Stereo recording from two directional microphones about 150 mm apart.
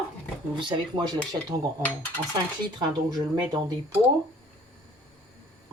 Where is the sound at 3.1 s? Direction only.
30° right (ahead or behind).